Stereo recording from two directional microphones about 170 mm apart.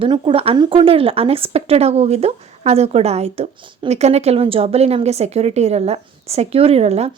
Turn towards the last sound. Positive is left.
turn(degrees=-40)  # may be behind; listen again after turning